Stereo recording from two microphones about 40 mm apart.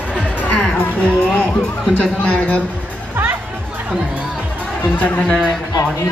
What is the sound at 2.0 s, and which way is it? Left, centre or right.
Speech, left.